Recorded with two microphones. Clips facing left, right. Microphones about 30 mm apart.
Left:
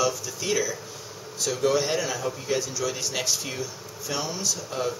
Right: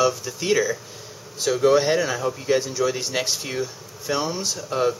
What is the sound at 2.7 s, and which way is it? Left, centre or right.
Speech, right.